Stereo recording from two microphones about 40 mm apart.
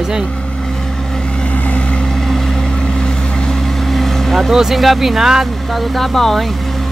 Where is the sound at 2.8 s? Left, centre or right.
Centre.